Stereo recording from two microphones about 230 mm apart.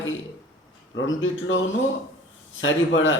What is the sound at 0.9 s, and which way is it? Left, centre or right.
Speech, left.